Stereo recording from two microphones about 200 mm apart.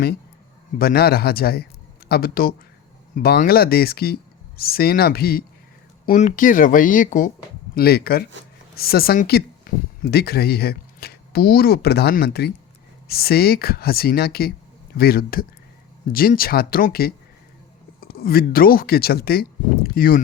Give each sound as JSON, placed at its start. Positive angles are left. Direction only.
{"t": 0.8, "sound": "speech", "side_deg": 50}
{"t": 7.8, "sound": "speech", "side_deg": 50}